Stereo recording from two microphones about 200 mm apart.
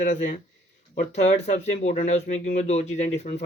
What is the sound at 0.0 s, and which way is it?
Speech, 40° left (ahead or behind).